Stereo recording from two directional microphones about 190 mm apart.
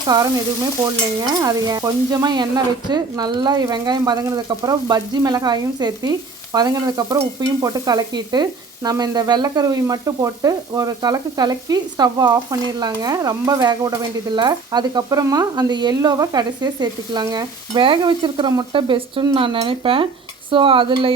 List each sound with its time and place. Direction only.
0.1 s speech: 20° right (ahead or behind)